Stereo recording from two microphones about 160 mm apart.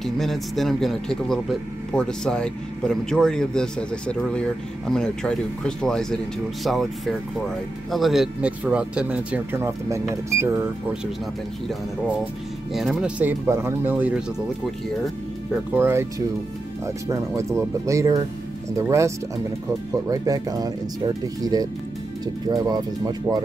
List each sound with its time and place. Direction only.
0.0 s speech: centre (ahead or behind); by 10.6 s 15° right (ahead or behind)
12.7 s speech: centre (ahead or behind)
13.2 s speech: 15° right (ahead or behind)
15.7 s speech: 15° right (ahead or behind)